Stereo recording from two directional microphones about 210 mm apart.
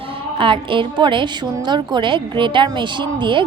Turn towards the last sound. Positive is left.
turn(degrees=-20)  # may be behind; listen again after turning